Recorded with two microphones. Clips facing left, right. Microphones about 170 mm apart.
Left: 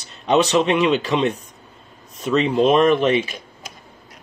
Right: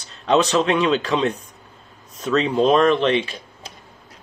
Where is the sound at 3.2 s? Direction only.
30° right (ahead or behind).